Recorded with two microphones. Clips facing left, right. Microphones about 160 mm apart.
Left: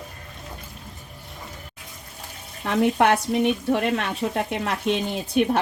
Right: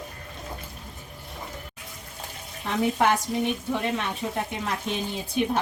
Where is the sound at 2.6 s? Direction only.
65° left (ahead or behind).